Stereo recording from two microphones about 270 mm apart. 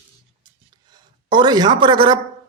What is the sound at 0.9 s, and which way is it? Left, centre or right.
A man's voice, centre.